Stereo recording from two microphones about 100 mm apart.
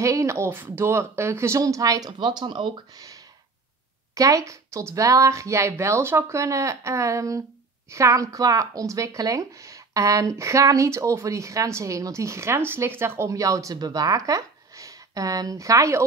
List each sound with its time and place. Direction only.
0.0 s speech: 30° right (ahead or behind)